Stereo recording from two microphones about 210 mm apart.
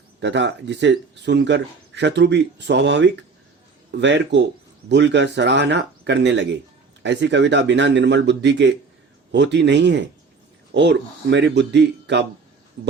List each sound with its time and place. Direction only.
0.2 s speech: 55° right (ahead or behind)